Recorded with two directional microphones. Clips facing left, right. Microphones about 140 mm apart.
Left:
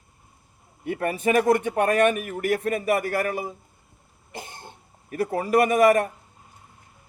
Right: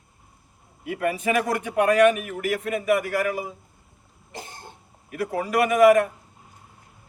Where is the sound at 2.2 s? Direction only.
45° left (ahead or behind).